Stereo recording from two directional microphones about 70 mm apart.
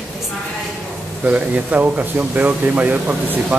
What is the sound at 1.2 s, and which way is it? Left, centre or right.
Speech, right.